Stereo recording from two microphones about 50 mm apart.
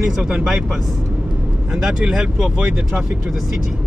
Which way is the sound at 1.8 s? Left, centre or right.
Centre.